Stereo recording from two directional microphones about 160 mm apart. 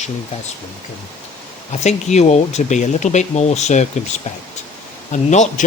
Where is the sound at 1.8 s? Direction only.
45° left (ahead or behind).